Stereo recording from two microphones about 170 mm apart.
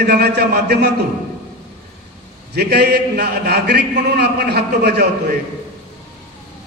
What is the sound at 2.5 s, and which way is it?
A man's voice, 75° right (ahead or behind).